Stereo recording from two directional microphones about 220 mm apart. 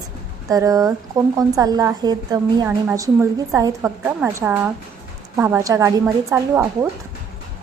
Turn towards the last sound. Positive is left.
turn(degrees=-10)  # may be behind; listen again after turning